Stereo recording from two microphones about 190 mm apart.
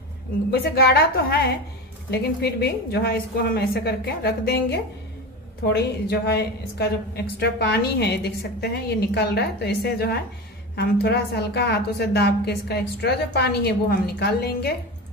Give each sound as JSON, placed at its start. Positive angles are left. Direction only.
{"t": 0.5, "sound": "a woman's voice", "side_deg": 55}